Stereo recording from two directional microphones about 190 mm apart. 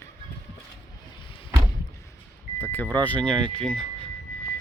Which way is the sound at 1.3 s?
25° left (ahead or behind).